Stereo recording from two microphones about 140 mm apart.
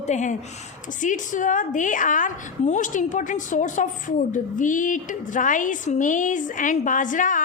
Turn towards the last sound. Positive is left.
turn(degrees=70)  # may be behind; listen again after turning